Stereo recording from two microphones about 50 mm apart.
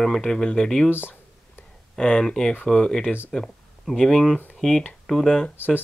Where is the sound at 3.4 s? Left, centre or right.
Centre.